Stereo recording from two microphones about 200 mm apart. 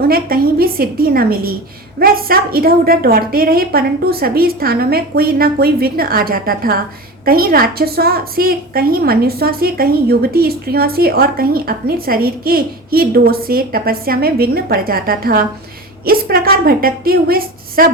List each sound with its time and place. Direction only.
0.0 s a woman's voice: 50° right (ahead or behind)